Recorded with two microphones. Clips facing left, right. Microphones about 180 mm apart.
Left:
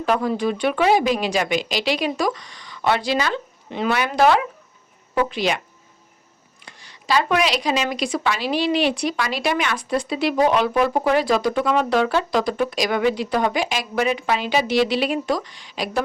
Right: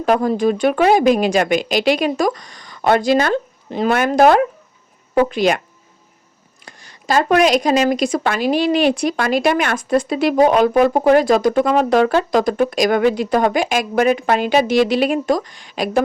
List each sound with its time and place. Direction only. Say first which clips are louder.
0.0 s speech: right 5 dB; 45° right (ahead or behind)
6.7 s speech: right 3 dB; 45° right (ahead or behind)